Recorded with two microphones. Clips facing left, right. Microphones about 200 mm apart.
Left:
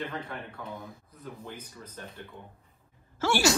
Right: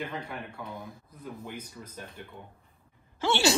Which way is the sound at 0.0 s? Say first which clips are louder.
Even; 10° right (ahead or behind).